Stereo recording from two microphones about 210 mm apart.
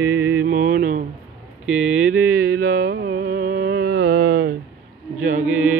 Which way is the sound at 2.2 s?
50° right (ahead or behind).